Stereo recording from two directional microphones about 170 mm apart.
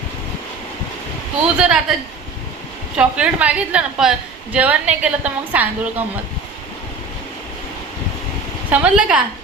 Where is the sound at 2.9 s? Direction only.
5° right (ahead or behind).